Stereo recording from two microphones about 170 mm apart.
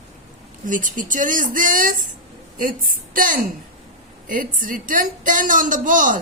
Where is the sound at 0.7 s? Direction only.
50° right (ahead or behind).